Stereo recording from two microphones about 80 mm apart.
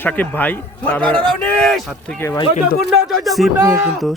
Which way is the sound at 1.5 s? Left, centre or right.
Centre.